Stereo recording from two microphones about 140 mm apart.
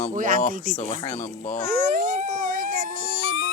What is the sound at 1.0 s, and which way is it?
Speech, 50° left (ahead or behind).